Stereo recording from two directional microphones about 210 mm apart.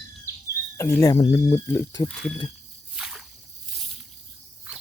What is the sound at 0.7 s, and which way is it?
Speech, 15° left (ahead or behind).